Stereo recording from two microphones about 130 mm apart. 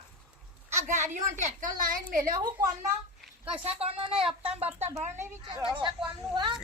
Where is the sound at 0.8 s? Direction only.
70° right (ahead or behind); by 2.2 s 90° right.